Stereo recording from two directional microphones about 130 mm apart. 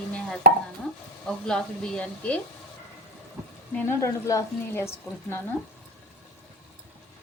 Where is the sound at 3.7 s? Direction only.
10° left (ahead or behind).